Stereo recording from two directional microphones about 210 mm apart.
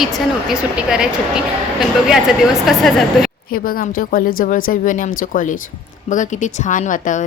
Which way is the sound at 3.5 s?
45° left (ahead or behind).